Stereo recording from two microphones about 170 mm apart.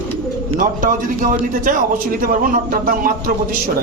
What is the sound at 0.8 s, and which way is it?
A man's voice, 50° right (ahead or behind).